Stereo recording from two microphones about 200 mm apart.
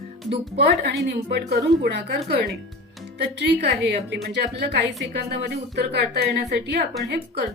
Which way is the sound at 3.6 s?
60° right (ahead or behind).